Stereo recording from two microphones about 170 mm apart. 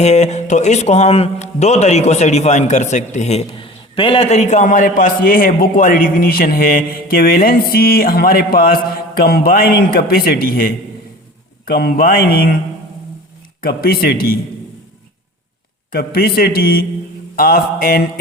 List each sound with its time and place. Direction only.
0.0 s speech: 40° left (ahead or behind); by 12.5 s 65° left (ahead or behind)
13.6 s speech: 65° left (ahead or behind)
15.9 s speech: 65° left (ahead or behind)